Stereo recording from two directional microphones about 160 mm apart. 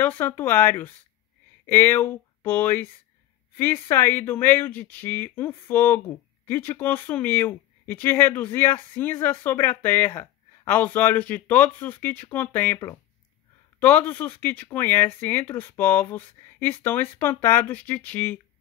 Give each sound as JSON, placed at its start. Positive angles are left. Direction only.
{"t": 0.0, "sound": "speech", "side_deg": 10}